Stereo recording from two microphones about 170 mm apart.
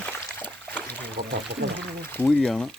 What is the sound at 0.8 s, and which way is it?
Speech, 70° right (ahead or behind).